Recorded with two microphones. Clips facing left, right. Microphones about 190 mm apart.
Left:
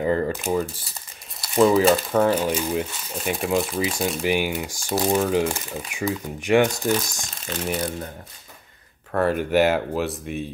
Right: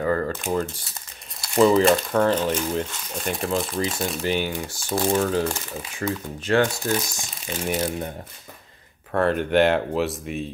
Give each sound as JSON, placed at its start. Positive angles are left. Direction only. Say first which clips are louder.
{"t": 0.0, "sound": "speech", "louder": "left 1 dB", "side_deg": 20}
{"t": 0.3, "sound": "speech", "louder": "left 1 dB", "side_deg": 5}
{"t": 7.6, "sound": "speech", "louder": "right 1 dB", "side_deg": 0}
{"t": 9.1, "sound": "speech", "louder": "even", "side_deg": 5}